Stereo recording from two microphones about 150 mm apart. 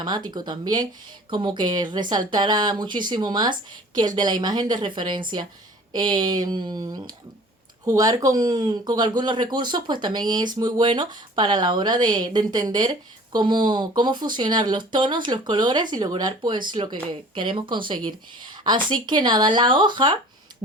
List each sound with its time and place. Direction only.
0.0 s a woman's voice: 30° right (ahead or behind)